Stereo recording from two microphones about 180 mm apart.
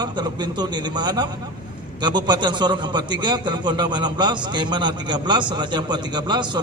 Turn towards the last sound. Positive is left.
turn(degrees=-25)  # may be behind; listen again after turning